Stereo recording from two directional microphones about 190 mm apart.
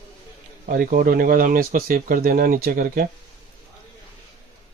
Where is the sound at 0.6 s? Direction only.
50° right (ahead or behind).